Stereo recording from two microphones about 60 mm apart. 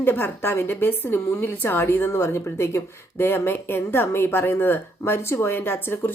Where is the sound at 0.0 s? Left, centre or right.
Left.